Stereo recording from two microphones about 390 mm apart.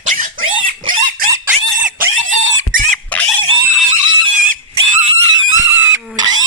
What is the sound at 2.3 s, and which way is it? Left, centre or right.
Rodents, right.